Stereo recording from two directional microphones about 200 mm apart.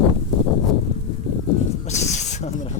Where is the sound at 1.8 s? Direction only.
35° left (ahead or behind).